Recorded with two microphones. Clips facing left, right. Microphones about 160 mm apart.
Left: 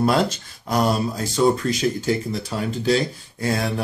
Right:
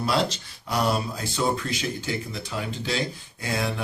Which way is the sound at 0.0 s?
50° left (ahead or behind).